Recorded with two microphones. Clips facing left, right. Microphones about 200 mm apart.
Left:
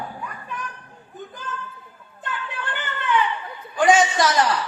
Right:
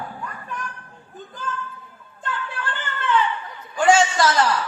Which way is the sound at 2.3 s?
15° left (ahead or behind).